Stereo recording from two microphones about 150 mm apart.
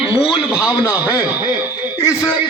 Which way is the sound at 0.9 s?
10° right (ahead or behind).